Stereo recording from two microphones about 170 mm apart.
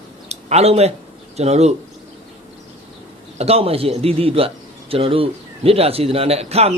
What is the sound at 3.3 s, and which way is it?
A man's voice, 35° right (ahead or behind).